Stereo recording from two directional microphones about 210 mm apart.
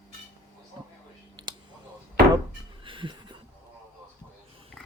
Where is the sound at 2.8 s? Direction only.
25° right (ahead or behind).